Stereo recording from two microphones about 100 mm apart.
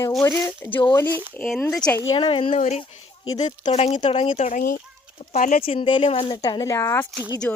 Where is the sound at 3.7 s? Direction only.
90° left.